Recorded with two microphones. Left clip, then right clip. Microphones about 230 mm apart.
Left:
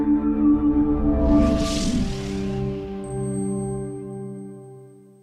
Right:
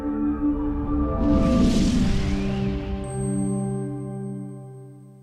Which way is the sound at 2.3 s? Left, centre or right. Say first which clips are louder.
Even; centre.